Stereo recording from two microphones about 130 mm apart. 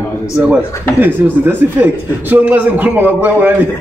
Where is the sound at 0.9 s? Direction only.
15° right (ahead or behind).